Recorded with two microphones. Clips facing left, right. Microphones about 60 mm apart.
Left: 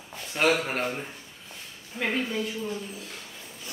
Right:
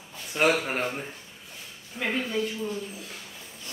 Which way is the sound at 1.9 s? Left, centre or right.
Centre.